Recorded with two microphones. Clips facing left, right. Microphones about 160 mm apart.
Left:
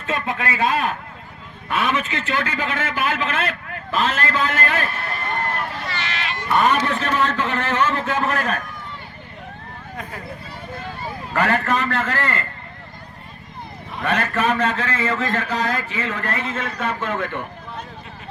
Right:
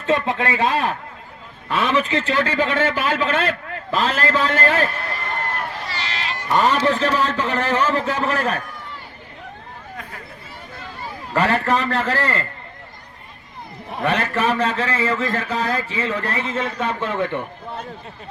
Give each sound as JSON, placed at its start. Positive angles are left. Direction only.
{"t": 0.0, "sound": "a man's voice", "side_deg": -30}
{"t": 5.9, "sound": "a sound", "side_deg": -35}
{"t": 6.7, "sound": "a man's voice", "side_deg": -30}
{"t": 11.3, "sound": "a man's voice", "side_deg": -30}
{"t": 14.0, "sound": "a man's voice", "side_deg": -30}